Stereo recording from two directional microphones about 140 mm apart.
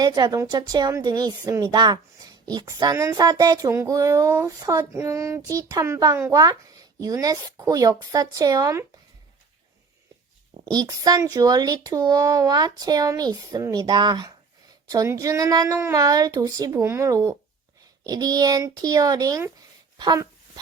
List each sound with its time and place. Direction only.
0.0 s a woman's voice: 30° right (ahead or behind)
10.7 s a woman's voice: 30° right (ahead or behind)